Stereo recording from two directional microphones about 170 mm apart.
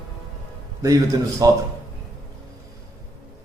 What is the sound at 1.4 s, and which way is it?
Speech, 20° right (ahead or behind).